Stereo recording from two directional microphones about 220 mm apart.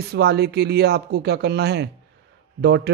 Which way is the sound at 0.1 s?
45° right (ahead or behind).